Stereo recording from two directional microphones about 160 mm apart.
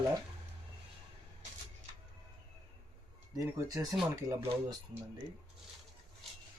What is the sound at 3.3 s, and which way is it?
Speech, 20° right (ahead or behind).